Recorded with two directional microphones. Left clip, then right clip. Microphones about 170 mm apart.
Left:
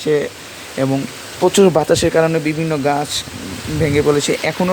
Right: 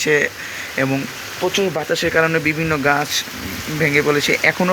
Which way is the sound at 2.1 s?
20° left (ahead or behind).